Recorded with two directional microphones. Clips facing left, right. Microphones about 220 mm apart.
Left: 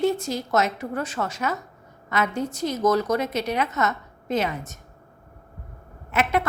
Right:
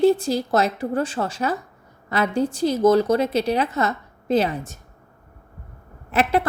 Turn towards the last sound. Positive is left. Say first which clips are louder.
# right 3 dB
turn(degrees=-35)  # may be behind; listen again after turning